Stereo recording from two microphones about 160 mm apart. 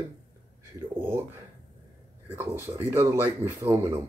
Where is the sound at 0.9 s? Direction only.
15° right (ahead or behind).